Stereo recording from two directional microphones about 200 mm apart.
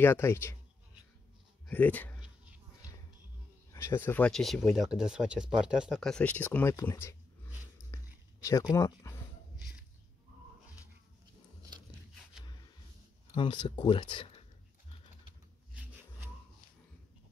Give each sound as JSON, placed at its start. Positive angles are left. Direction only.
{"t": 0.0, "sound": "speech", "side_deg": 10}
{"t": 1.7, "sound": "speech", "side_deg": 10}
{"t": 3.7, "sound": "speech", "side_deg": 10}
{"t": 7.9, "sound": "a sound", "side_deg": 15}
{"t": 13.3, "sound": "speech", "side_deg": 25}